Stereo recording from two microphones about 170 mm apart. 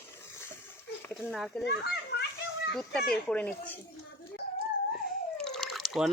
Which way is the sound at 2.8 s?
5° left (ahead or behind).